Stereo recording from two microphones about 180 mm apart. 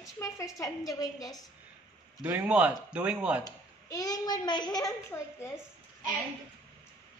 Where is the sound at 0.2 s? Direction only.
15° left (ahead or behind).